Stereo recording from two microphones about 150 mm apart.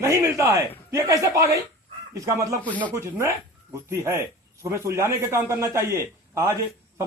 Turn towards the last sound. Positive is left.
turn(degrees=-20)  # may be behind; listen again after turning